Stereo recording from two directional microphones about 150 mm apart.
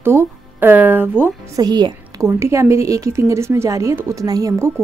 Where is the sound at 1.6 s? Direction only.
30° right (ahead or behind).